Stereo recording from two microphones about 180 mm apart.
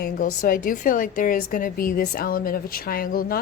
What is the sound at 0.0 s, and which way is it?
A woman's voice, 45° left (ahead or behind).